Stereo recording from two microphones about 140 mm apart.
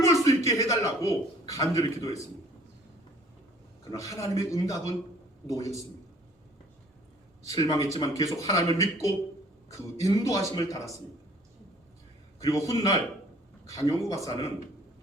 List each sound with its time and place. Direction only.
0.0 s a sound: 25° left (ahead or behind)
3.9 s speech: 25° left (ahead or behind)
7.4 s speech: 25° left (ahead or behind)
12.4 s a man's voice: 25° left (ahead or behind)